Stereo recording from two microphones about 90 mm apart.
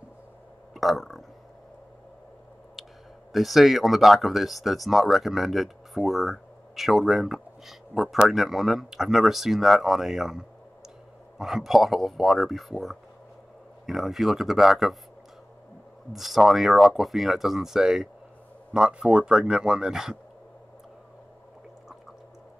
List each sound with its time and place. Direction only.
0.7 s burping: centre (ahead or behind)
3.3 s speech: centre (ahead or behind)
16.1 s speech: centre (ahead or behind)